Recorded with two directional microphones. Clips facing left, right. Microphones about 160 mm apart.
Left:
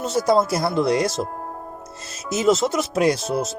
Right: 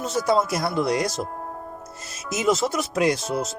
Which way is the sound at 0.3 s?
30° left (ahead or behind).